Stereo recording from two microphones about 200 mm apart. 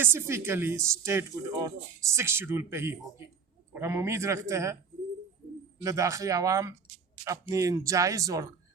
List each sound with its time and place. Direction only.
0.0 s speech: 10° right (ahead or behind)
5.8 s speech: 15° right (ahead or behind)